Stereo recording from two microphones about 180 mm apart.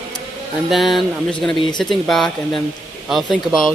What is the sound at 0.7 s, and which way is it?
Speech, centre (ahead or behind).